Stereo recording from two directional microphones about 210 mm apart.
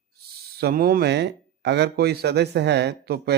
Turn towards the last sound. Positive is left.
turn(degrees=-50)  # may be behind; listen again after turning